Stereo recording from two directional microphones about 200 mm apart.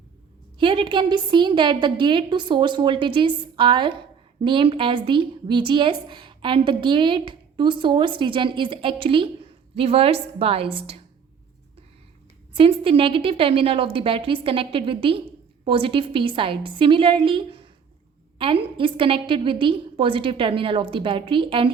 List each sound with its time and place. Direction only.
0.6 s a woman's voice: 25° right (ahead or behind)
12.5 s a woman's voice: 25° right (ahead or behind)